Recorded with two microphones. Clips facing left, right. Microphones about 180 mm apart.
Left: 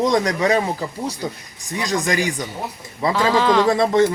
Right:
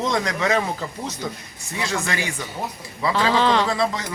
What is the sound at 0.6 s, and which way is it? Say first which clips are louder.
Speech: left 3 dB; 15° left (ahead or behind).